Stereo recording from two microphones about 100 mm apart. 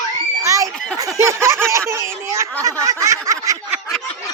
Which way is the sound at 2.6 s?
35° right (ahead or behind).